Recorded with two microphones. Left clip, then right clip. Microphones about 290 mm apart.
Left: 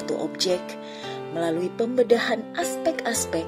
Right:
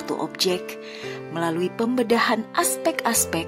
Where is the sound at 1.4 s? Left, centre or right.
Centre.